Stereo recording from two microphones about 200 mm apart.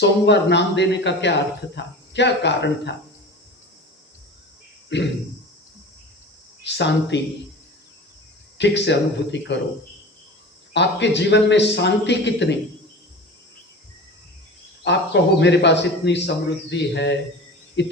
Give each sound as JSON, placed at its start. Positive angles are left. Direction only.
{"t": 0.0, "sound": "speech", "side_deg": 60}
{"t": 4.9, "sound": "speech", "side_deg": 65}
{"t": 6.6, "sound": "speech", "side_deg": 60}
{"t": 8.5, "sound": "speech", "side_deg": 60}
{"t": 10.8, "sound": "speech", "side_deg": 60}
{"t": 14.8, "sound": "speech", "side_deg": 60}